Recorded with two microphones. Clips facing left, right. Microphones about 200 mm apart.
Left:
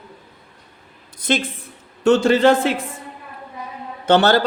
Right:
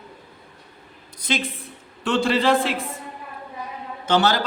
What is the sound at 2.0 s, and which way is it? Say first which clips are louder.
Speech: left 7 dB; 45° left (ahead or behind).